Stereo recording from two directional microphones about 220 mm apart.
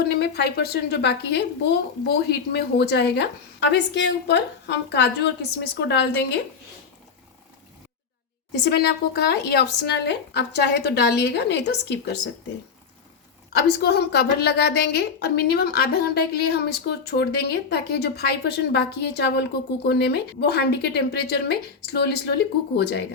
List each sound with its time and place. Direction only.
0.0 s speech: 45° left (ahead or behind)
8.6 s speech: 50° left (ahead or behind)
13.5 s speech: 45° left (ahead or behind)